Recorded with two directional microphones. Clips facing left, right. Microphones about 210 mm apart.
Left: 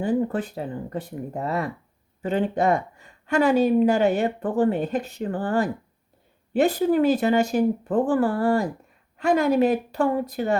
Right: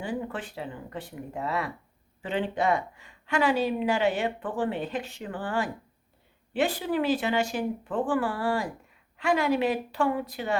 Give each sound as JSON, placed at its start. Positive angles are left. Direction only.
{"t": 0.0, "sound": "speech", "side_deg": 40}